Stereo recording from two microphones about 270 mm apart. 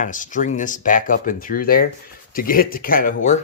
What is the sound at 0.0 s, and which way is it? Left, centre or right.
Speech, left.